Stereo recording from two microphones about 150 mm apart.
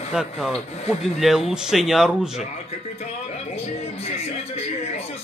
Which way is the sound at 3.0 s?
45° left (ahead or behind).